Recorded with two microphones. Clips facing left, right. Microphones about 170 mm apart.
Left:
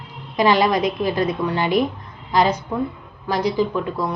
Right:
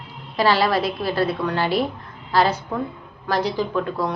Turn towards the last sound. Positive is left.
turn(degrees=10)  # may be behind; listen again after turning